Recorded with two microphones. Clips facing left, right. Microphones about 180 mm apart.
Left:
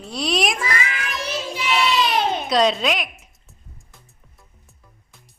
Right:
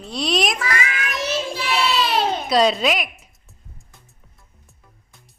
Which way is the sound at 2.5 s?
5° right (ahead or behind).